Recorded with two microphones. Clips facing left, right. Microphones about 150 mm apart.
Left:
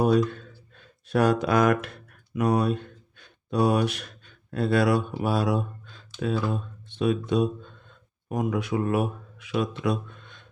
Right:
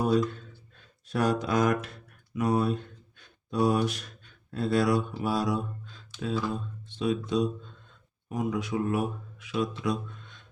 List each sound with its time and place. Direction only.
1.0 s speech: 65° left (ahead or behind)